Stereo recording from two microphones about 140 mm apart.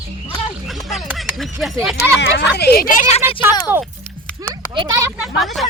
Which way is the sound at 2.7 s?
80° left.